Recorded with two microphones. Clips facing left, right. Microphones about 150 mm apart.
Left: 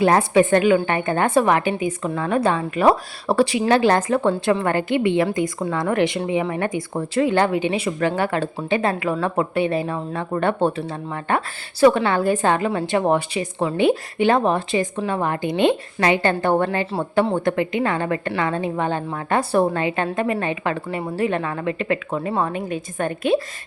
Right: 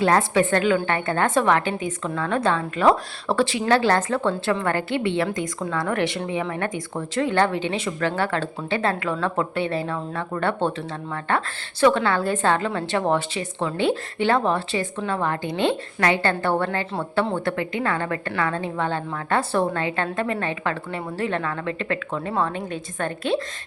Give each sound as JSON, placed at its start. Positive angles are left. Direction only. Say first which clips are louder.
{"t": 0.0, "sound": "a woman's voice", "louder": "left 3 dB", "side_deg": 15}